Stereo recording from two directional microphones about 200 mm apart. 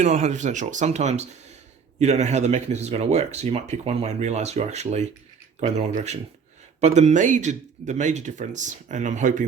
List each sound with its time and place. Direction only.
0.0 s speech: 35° right (ahead or behind)